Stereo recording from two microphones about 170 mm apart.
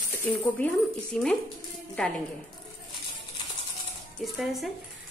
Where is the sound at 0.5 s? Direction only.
10° left (ahead or behind).